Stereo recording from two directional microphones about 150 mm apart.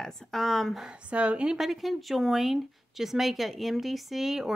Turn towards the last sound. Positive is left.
turn(degrees=0)  # may be behind; listen again after turning